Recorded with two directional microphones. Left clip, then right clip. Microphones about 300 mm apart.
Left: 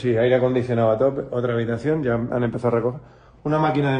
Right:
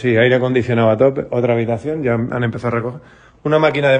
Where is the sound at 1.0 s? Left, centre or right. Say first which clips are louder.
Right 6 dB; centre.